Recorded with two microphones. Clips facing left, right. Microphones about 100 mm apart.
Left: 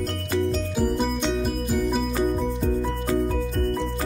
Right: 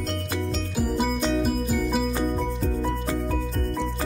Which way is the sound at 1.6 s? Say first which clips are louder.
Left 1 dB; centre (ahead or behind).